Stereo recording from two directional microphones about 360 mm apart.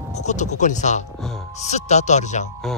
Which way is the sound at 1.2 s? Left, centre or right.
Centre.